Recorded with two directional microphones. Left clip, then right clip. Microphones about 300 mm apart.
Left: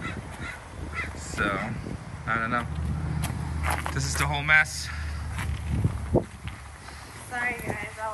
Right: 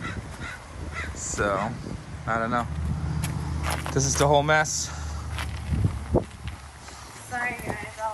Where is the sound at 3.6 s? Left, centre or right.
Centre.